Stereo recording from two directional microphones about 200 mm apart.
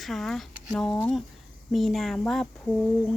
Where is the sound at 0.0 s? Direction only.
Centre (ahead or behind).